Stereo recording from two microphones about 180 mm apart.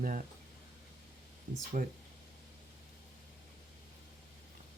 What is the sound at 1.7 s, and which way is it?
Speech, 45° right (ahead or behind).